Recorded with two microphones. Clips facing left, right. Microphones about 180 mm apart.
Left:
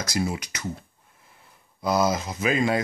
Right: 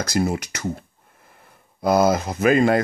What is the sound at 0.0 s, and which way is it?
Speech, 55° right (ahead or behind).